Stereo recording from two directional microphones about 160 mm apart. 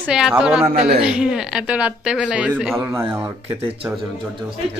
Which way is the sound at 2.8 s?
20° right (ahead or behind).